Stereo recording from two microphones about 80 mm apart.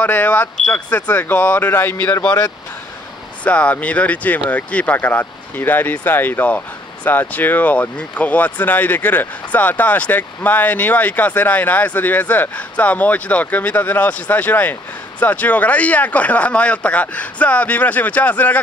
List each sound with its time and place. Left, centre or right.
0.0 s speech: left
3.4 s speech: centre